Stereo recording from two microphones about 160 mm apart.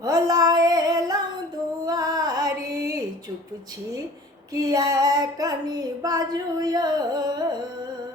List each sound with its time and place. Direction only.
0.0 s female singing: 20° right (ahead or behind)
1.9 s music: 20° right (ahead or behind)
4.5 s female singing: 25° right (ahead or behind)